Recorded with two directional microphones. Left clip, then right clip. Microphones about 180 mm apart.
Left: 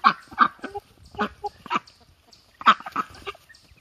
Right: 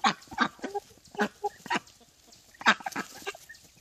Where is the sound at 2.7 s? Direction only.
10° left (ahead or behind).